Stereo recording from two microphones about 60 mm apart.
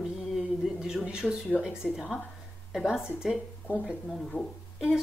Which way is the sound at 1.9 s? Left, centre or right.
Centre.